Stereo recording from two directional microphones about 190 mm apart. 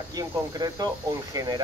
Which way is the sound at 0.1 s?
20° right (ahead or behind).